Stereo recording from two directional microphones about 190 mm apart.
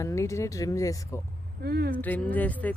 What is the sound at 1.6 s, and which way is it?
Speech, 55° right (ahead or behind).